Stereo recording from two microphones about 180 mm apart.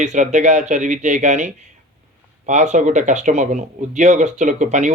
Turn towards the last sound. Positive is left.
turn(degrees=-40)  # may be behind; listen again after turning